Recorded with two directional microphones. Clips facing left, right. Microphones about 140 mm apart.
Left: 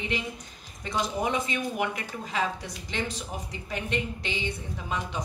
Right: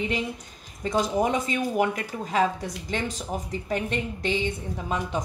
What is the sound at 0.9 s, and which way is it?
A woman's voice, 40° right (ahead or behind).